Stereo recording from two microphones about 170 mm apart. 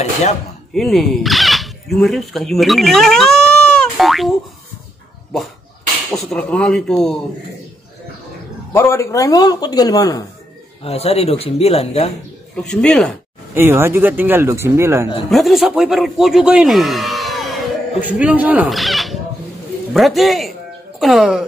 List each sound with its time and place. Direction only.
0.7 s speech: centre (ahead or behind)
6.1 s speech: 5° left (ahead or behind)
8.7 s speech: 15° left (ahead or behind)
10.8 s speech: 35° left (ahead or behind)
12.5 s speech: 5° left (ahead or behind)
13.6 s speech: 15° right (ahead or behind)
15.2 s speech: centre (ahead or behind)